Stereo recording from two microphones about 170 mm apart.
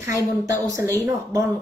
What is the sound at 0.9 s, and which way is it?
Speech, 20° right (ahead or behind).